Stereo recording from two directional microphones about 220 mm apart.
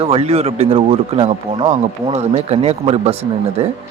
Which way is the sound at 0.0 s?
25° right (ahead or behind).